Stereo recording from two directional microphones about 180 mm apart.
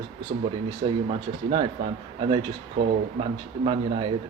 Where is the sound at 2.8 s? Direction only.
90° right.